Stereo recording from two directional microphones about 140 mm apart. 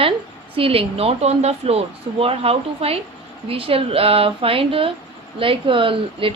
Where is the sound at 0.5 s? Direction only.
40° right (ahead or behind).